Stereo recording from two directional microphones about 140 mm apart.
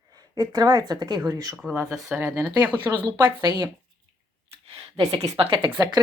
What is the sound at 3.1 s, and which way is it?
Speech, 30° right (ahead or behind).